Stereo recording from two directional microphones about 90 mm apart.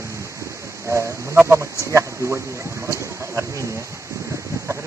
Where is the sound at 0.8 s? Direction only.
25° right (ahead or behind).